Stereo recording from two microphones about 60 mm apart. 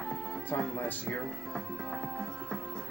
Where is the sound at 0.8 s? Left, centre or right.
Left.